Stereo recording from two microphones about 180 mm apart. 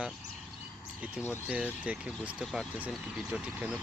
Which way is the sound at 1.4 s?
5° right (ahead or behind).